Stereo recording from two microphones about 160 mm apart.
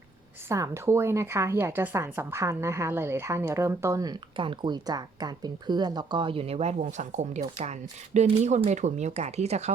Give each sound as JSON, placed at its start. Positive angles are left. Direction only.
{"t": 0.4, "sound": "a woman's voice", "side_deg": -20}